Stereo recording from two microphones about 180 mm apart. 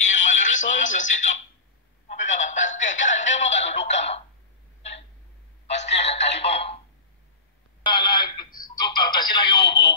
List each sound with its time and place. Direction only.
0.0 s a sound: 45° left (ahead or behind)
2.2 s music: 45° left (ahead or behind)
5.7 s telephone: 35° left (ahead or behind)
7.8 s telephone: 25° left (ahead or behind)
8.5 s a sound: 50° left (ahead or behind)
8.8 s music: 25° left (ahead or behind)